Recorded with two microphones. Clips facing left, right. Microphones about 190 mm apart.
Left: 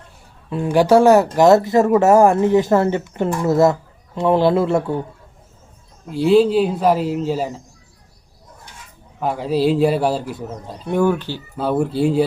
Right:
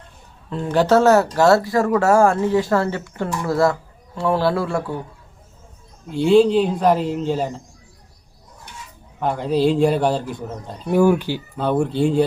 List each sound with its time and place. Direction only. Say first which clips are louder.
0.5 s speech: left 3 dB; 10° left (ahead or behind)
6.1 s speech: even; 5° left (ahead or behind)
9.2 s speech: even; 5° left (ahead or behind); by 11.4 s 15° right (ahead or behind)
11.5 s speech: left 1 dB; 5° left (ahead or behind)